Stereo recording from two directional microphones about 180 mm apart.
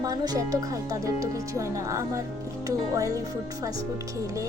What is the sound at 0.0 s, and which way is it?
Speech, 20° right (ahead or behind).